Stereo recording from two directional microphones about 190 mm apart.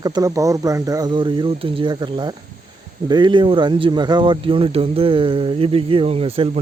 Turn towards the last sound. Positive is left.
turn(degrees=-30)  # may be behind; listen again after turning